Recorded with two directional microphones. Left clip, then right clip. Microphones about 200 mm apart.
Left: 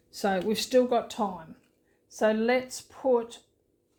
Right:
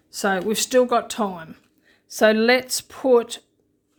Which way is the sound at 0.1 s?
30° right (ahead or behind).